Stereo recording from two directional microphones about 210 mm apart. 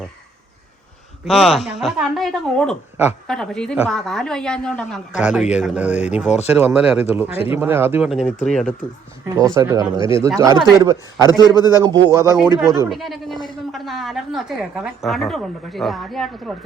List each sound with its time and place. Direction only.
1.2 s a woman's voice: centre (ahead or behind)
5.9 s speech: 35° left (ahead or behind)
6.6 s a woman's voice: 5° right (ahead or behind)
7.3 s a man's voice: 30° left (ahead or behind)
7.6 s a woman's voice: 10° right (ahead or behind)
9.3 s speech: 15° right (ahead or behind)
11.3 s a man's voice: 20° left (ahead or behind)
11.8 s speech: 15° right (ahead or behind)
12.5 s a woman's voice: centre (ahead or behind)